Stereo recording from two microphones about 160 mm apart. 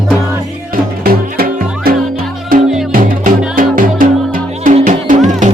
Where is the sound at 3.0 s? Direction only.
60° right (ahead or behind).